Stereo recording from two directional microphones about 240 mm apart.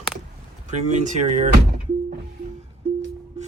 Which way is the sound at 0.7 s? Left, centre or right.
Right.